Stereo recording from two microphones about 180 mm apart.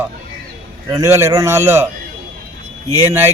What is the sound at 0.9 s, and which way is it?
Speech, 15° right (ahead or behind).